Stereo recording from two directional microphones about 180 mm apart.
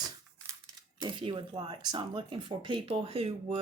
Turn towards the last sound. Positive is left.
turn(degrees=-30)  # may be behind; listen again after turning